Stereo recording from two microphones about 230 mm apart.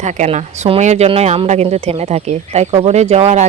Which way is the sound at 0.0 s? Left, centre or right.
Right.